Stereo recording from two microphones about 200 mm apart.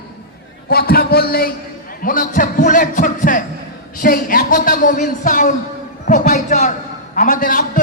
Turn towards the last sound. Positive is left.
turn(degrees=45)  # may be behind; listen again after turning